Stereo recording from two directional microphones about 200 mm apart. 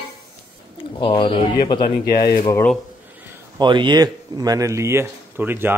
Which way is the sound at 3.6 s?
25° right (ahead or behind).